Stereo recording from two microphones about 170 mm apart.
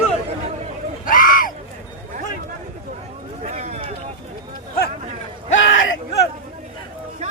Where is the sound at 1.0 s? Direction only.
55° left (ahead or behind).